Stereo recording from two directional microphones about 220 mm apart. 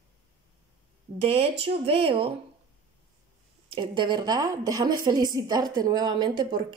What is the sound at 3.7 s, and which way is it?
A woman's voice, 20° right (ahead or behind).